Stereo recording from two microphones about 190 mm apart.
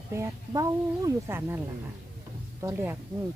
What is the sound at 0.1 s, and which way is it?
Speech, 15° right (ahead or behind).